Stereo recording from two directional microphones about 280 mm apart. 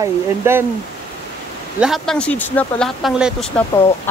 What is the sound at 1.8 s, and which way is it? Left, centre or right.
Speech, centre.